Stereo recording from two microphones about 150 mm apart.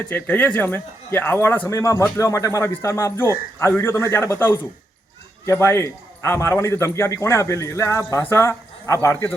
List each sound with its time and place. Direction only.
0.0 s a man's voice: 10° left (ahead or behind)